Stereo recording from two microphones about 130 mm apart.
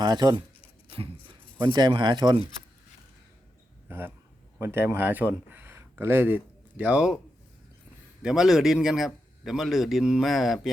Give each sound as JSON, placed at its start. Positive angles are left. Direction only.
{"t": 0.0, "sound": "speech", "side_deg": -35}
{"t": 1.5, "sound": "speech", "side_deg": -35}
{"t": 3.8, "sound": "speech", "side_deg": -15}
{"t": 8.2, "sound": "a man's voice", "side_deg": -5}